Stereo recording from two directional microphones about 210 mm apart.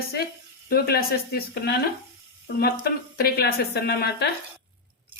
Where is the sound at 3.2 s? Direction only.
50° left (ahead or behind).